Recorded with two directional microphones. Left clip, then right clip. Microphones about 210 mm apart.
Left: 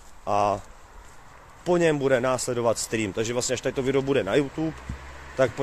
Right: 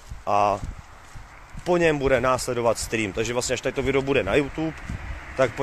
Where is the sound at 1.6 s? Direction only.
5° left (ahead or behind).